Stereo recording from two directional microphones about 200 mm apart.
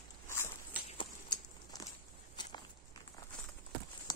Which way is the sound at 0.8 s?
20° left (ahead or behind).